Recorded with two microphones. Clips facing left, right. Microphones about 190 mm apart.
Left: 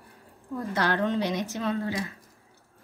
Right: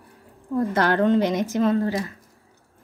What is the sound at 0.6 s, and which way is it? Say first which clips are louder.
A woman's voice: right 6 dB; 55° right (ahead or behind).